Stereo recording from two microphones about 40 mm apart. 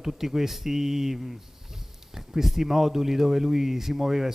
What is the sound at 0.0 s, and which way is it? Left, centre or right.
Speech, centre.